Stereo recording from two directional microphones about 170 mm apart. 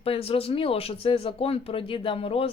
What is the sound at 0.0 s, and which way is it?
Speech, 35° left (ahead or behind).